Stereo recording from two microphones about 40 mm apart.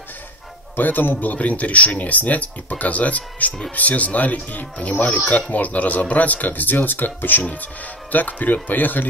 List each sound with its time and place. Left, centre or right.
0.7 s speech: left